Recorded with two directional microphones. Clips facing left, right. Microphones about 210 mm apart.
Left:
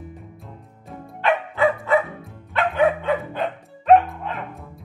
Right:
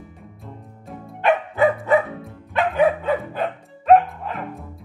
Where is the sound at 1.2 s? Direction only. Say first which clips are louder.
Right 2 dB; 20° right (ahead or behind).